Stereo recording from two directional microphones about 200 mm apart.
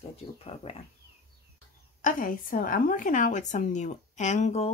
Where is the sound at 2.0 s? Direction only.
40° left (ahead or behind).